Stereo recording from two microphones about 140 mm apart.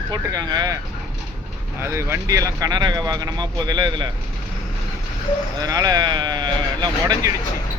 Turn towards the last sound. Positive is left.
turn(degrees=-30)  # may be behind; listen again after turning